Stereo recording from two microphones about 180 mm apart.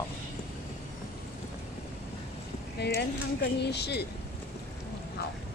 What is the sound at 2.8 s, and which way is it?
Speech, 65° left (ahead or behind).